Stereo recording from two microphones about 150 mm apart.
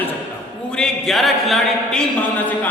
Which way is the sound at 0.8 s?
Centre (ahead or behind).